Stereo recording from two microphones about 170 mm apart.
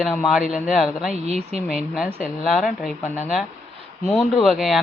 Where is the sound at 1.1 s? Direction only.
40° right (ahead or behind).